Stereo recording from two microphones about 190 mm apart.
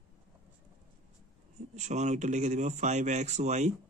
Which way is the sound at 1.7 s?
40° right (ahead or behind).